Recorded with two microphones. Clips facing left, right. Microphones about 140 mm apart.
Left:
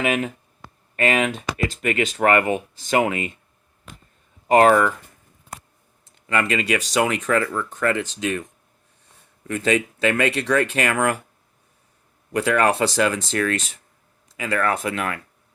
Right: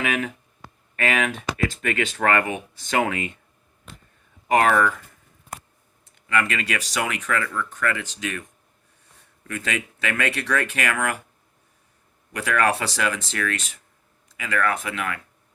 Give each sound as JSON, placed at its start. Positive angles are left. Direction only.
{"t": 0.0, "sound": "speech", "side_deg": 30}
{"t": 4.4, "sound": "speech", "side_deg": 30}
{"t": 6.2, "sound": "speech", "side_deg": 25}
{"t": 9.5, "sound": "speech", "side_deg": 25}
{"t": 12.3, "sound": "speech", "side_deg": 30}